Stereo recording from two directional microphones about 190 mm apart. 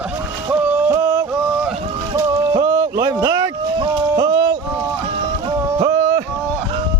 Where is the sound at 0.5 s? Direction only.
15° right (ahead or behind).